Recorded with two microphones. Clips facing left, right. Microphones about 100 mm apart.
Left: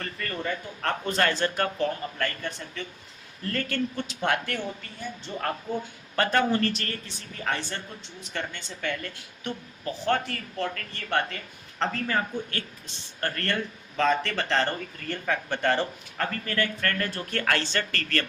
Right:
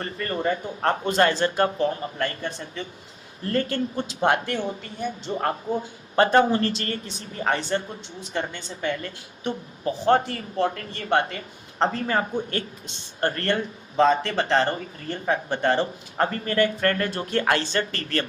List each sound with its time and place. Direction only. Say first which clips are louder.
0.0 s speech: right 6 dB; 30° right (ahead or behind)